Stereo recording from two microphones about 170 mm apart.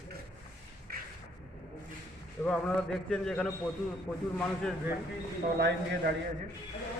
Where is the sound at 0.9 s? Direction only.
65° right (ahead or behind).